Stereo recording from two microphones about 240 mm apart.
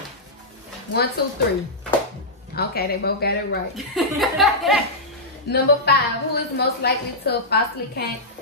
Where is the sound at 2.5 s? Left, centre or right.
Left.